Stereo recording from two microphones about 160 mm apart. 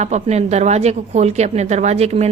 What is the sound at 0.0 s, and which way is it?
A woman's voice, 45° right (ahead or behind).